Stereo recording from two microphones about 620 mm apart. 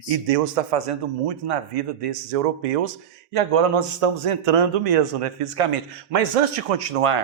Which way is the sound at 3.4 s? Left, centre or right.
Right.